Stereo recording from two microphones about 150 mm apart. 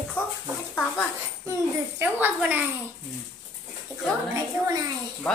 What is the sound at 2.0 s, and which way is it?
Speech, 15° right (ahead or behind).